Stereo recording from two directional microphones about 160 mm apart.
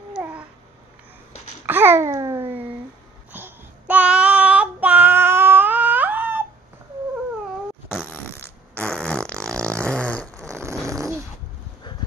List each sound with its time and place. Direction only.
0.1 s cat: 10° right (ahead or behind)
1.7 s babbling: 15° right (ahead or behind)
3.3 s child singing: 10° right (ahead or behind)
8.7 s fart: 5° left (ahead or behind)
9.8 s a sound: 5° left (ahead or behind)
10.5 s a sound: 15° right (ahead or behind)